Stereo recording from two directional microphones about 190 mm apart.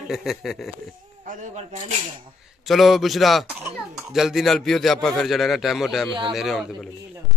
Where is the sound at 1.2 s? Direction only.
40° right (ahead or behind).